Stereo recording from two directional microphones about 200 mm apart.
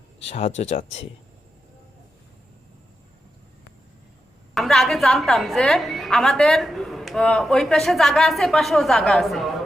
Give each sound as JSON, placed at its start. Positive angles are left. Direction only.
{"t": 0.3, "sound": "speech", "side_deg": 35}
{"t": 4.5, "sound": "a woman's voice", "side_deg": 0}